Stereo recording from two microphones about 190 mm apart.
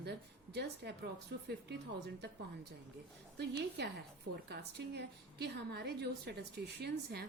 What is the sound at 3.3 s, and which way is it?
A woman's voice, 65° right (ahead or behind).